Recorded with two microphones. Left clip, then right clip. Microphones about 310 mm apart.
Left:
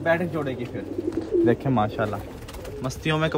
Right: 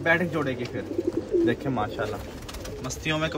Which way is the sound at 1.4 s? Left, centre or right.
Centre.